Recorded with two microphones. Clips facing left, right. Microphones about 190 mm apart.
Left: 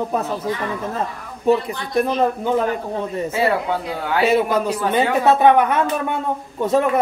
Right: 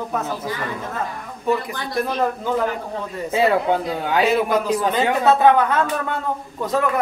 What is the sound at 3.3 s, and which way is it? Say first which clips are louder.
Speech: right 4 dB; 20° right (ahead or behind).